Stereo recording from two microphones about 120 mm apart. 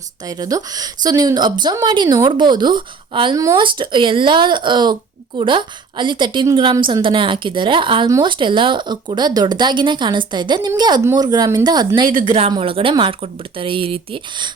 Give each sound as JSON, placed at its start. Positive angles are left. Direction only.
{"t": 0.3, "sound": "speech", "side_deg": -30}
{"t": 3.3, "sound": "speech", "side_deg": -30}
{"t": 3.6, "sound": "a woman's voice", "side_deg": -45}
{"t": 12.5, "sound": "a woman's voice", "side_deg": -50}